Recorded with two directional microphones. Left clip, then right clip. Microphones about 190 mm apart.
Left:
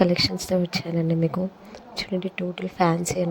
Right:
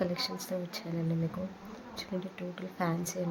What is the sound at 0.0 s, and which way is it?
Speech, 40° left (ahead or behind).